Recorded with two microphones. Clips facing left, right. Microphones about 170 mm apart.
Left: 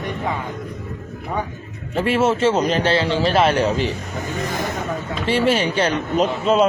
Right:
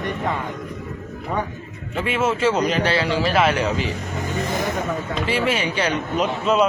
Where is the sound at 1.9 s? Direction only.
35° left (ahead or behind).